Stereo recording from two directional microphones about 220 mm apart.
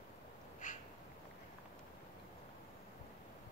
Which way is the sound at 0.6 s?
35° left (ahead or behind).